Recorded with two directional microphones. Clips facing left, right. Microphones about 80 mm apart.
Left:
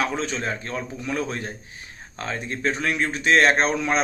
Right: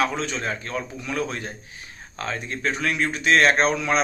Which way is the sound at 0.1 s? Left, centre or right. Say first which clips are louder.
Left 1 dB; left.